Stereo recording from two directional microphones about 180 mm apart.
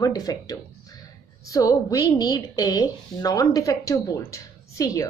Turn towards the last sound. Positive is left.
turn(degrees=20)  # may be behind; listen again after turning